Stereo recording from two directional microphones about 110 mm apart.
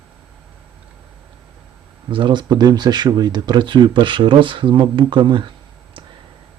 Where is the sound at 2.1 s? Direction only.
45° right (ahead or behind).